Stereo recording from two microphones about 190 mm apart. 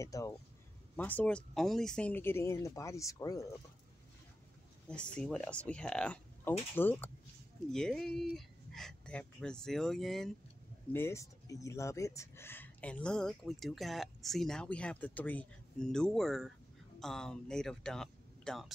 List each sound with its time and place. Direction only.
0.0 s speech: 15° left (ahead or behind)
4.8 s speech: 5° left (ahead or behind)
10.9 s speech: 10° left (ahead or behind)